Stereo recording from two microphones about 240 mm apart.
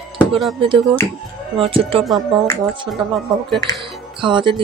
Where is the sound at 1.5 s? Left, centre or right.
Right.